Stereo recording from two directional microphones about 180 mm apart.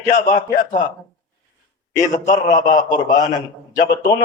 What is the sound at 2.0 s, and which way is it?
Speech, 45° left (ahead or behind).